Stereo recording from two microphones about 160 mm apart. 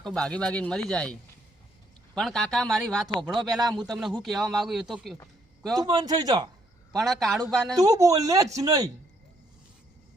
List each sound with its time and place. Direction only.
0.0 s speech: 5° left (ahead or behind)
2.1 s speech: 5° left (ahead or behind)
5.7 s speech: 25° right (ahead or behind)
6.9 s speech: centre (ahead or behind)
7.8 s speech: 20° right (ahead or behind)